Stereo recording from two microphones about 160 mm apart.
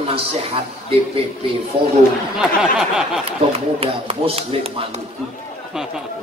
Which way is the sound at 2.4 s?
5° right (ahead or behind).